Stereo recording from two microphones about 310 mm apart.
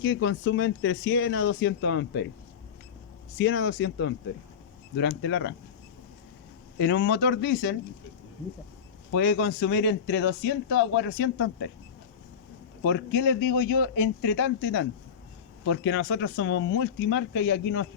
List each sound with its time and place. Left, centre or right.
0.0 s speech: left
3.3 s speech: left
6.7 s speech: left
9.1 s speech: left
12.8 s speech: left